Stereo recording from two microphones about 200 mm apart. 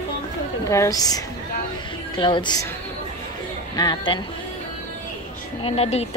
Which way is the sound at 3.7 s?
20° left (ahead or behind).